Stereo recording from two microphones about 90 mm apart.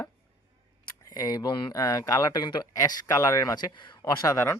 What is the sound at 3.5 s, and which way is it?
Speech, 55° left (ahead or behind).